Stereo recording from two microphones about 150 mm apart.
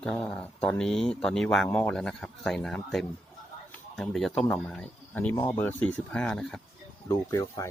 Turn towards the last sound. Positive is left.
turn(degrees=20)  # may be behind; listen again after turning